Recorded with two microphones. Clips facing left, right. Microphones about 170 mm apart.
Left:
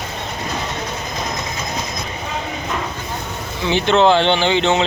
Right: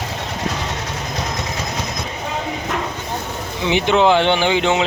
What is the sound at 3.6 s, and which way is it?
Speech, 15° right (ahead or behind).